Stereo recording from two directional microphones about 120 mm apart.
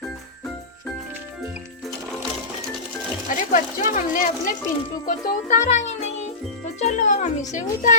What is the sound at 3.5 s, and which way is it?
Speech, 90° left.